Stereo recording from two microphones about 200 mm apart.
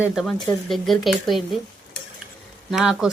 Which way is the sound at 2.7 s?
Centre (ahead or behind).